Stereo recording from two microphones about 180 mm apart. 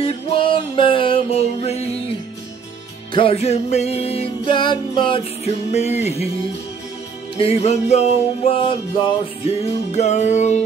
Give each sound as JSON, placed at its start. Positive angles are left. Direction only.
{"t": 0.0, "sound": "music", "side_deg": 30}
{"t": 3.1, "sound": "music", "side_deg": 30}
{"t": 7.3, "sound": "music", "side_deg": 35}